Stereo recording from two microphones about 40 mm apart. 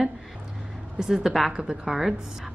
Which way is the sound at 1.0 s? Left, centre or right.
Centre.